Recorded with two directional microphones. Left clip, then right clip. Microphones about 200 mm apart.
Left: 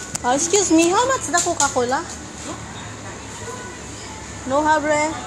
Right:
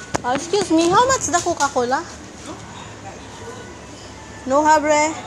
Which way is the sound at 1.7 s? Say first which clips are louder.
Right 1 dB; 20° right (ahead or behind).